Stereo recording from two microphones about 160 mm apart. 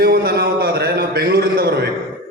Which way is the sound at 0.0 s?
75° right (ahead or behind).